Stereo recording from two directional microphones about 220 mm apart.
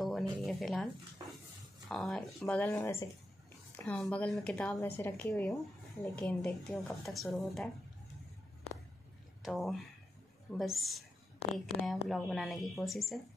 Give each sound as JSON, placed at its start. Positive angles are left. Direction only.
{"t": 0.0, "sound": "a sound", "side_deg": 0}
{"t": 1.9, "sound": "speech", "side_deg": 0}
{"t": 9.4, "sound": "speech", "side_deg": 0}